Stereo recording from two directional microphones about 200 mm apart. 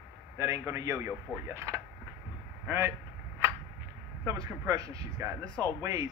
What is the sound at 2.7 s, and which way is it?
Cap gun, 10° right (ahead or behind).